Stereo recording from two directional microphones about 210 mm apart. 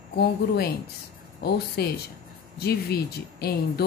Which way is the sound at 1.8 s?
50° left (ahead or behind).